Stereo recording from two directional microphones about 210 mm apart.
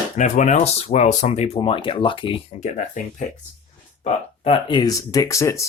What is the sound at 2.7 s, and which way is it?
Speech, 35° left (ahead or behind).